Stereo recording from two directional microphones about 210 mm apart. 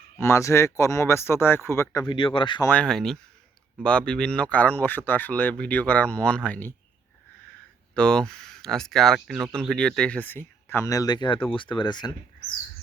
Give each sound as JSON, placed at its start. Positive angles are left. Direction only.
{"t": 0.2, "sound": "speech", "side_deg": 15}
{"t": 2.6, "sound": "speech", "side_deg": 5}
{"t": 7.9, "sound": "speech", "side_deg": 5}